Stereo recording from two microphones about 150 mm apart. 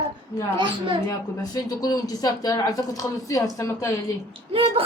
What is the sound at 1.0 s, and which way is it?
Speech, 25° left (ahead or behind).